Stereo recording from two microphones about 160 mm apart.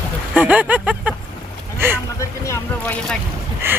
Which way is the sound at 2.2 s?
20° left (ahead or behind).